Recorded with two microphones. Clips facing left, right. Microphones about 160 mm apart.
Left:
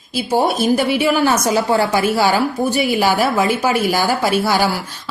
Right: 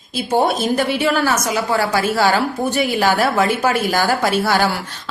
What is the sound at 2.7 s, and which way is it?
A woman's voice, 5° left (ahead or behind).